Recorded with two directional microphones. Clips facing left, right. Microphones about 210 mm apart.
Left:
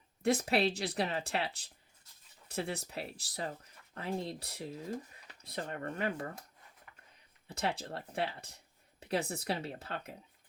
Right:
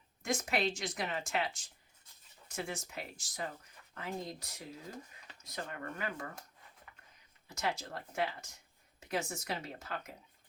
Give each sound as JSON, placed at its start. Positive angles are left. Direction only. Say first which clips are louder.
{"t": 0.2, "sound": "speech", "louder": "left 5 dB", "side_deg": 35}
{"t": 7.4, "sound": "speech", "louder": "left 2 dB", "side_deg": 30}